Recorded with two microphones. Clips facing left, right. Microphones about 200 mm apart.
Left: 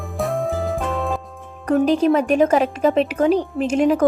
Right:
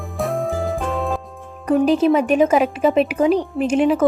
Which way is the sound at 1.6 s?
5° right (ahead or behind).